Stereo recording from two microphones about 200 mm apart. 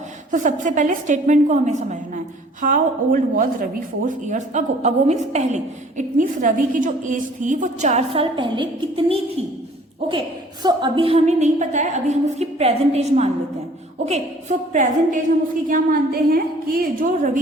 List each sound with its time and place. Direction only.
0.3 s a woman's voice: 40° right (ahead or behind)